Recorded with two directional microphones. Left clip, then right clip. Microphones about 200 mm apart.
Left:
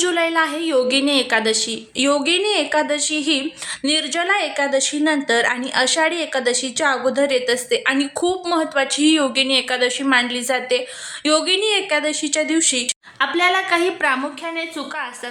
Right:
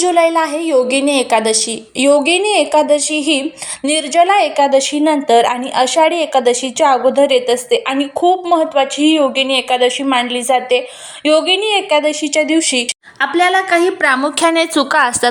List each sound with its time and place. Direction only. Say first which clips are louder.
0.0 s a woman's voice: right 6 dB; 5° right (ahead or behind)
14.4 s a woman's voice: right 13 dB; 55° right (ahead or behind)